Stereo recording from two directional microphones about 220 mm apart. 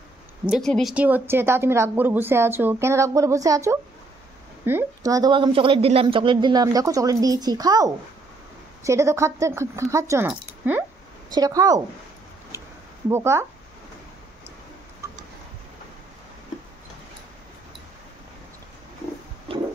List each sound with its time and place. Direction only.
0.5 s a woman's voice: centre (ahead or behind); by 11.8 s 15° right (ahead or behind)
13.1 s a woman's voice: 10° right (ahead or behind)